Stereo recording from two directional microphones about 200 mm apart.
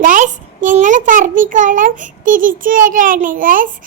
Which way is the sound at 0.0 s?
40° right (ahead or behind).